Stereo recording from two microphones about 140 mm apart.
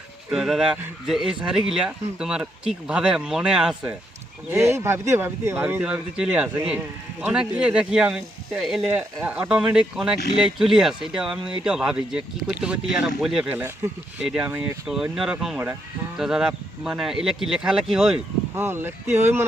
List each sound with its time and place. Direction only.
0.3 s speech: 5° right (ahead or behind)
4.5 s speech: 20° right (ahead or behind); by 13.5 s 5° right (ahead or behind)
13.5 s speech: 15° right (ahead or behind)
18.5 s speech: 15° right (ahead or behind)